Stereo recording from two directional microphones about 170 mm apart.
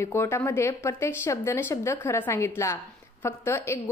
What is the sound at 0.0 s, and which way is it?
A woman's voice, 15° left (ahead or behind).